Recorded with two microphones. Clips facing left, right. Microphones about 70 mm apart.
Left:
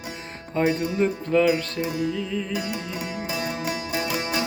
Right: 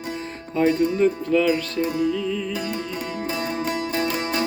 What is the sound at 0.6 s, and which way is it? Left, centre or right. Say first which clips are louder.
Speech: right 3 dB; left.